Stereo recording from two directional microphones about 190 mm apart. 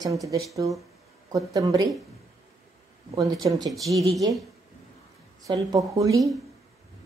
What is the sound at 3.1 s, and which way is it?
Speech, 15° right (ahead or behind).